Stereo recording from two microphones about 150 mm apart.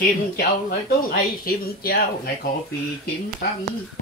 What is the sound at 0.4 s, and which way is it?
Speech, 75° left (ahead or behind).